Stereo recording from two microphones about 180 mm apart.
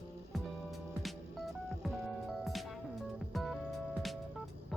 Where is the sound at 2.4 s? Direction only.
Centre (ahead or behind).